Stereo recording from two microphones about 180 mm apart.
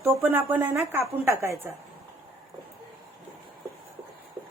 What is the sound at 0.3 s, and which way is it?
A woman's voice, 10° right (ahead or behind).